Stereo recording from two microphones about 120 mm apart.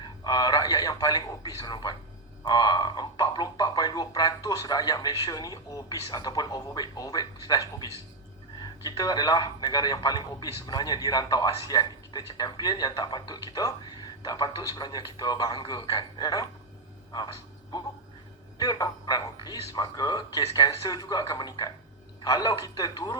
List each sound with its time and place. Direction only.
0.0 s a man's voice: 35° left (ahead or behind)
8.6 s a man's voice: 35° left (ahead or behind)
17.1 s music: 35° left (ahead or behind)
18.6 s a man's voice: 30° left (ahead or behind)